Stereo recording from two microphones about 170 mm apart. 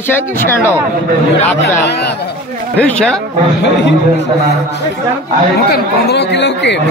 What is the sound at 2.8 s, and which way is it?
Speech, 5° left (ahead or behind).